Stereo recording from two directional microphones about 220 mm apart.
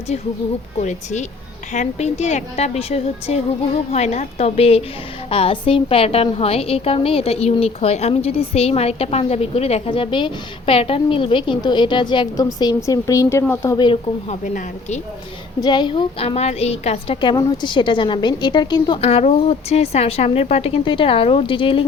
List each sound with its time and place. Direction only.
0.8 s a woman's voice: 30° left (ahead or behind)
15.6 s a woman's voice: 20° left (ahead or behind)